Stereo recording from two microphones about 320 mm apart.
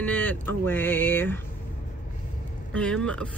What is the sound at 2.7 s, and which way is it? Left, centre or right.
Speech, centre.